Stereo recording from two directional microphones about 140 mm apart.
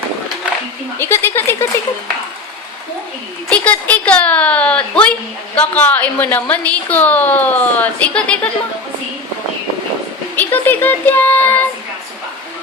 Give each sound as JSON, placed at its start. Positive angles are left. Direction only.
{"t": 0.9, "sound": "a woman's voice", "side_deg": 15}
{"t": 3.5, "sound": "a woman's voice", "side_deg": 10}
{"t": 10.3, "sound": "a woman's voice", "side_deg": 15}